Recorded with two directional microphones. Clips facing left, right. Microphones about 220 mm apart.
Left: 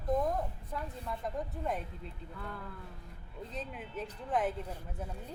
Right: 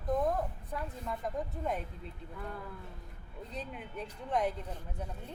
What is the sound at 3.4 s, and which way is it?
Speech, centre (ahead or behind).